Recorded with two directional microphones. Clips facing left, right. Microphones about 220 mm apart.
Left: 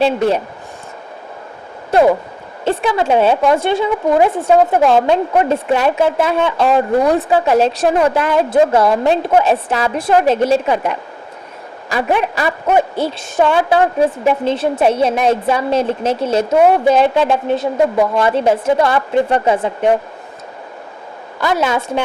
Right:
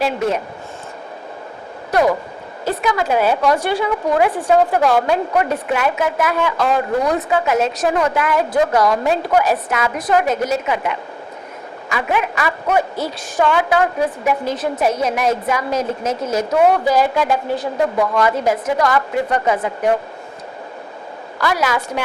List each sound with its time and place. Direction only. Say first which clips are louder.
0.0 s a woman's voice: left 5 dB; 30° left (ahead or behind)
1.9 s a sound: left 4 dB; 25° left (ahead or behind)
2.6 s a woman's voice: left 4 dB; 30° left (ahead or behind)
21.3 s a woman's voice: left 3 dB; 25° left (ahead or behind)